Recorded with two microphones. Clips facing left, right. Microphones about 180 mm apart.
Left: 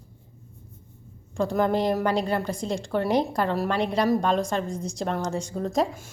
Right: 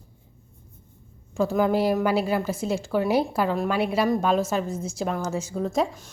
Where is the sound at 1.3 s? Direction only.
5° right (ahead or behind).